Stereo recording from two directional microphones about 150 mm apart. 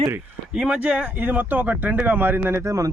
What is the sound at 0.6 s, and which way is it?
Speech, 5° right (ahead or behind).